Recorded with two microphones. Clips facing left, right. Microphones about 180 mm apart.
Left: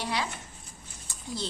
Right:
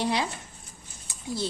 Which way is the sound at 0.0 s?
20° right (ahead or behind).